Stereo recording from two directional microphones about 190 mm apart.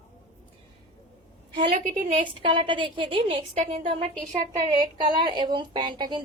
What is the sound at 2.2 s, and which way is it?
Speech, 25° right (ahead or behind).